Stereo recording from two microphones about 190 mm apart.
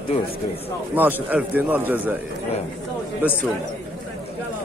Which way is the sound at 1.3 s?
10° right (ahead or behind).